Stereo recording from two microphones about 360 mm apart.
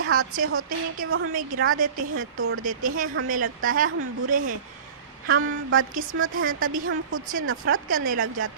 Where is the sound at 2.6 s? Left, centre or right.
Right.